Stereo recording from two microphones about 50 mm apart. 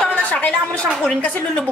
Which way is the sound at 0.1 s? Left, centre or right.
Left.